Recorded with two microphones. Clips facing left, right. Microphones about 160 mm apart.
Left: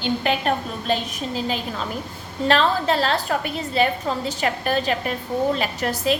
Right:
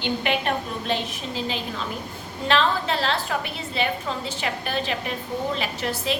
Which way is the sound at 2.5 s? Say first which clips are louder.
Left 3 dB; 40° left (ahead or behind).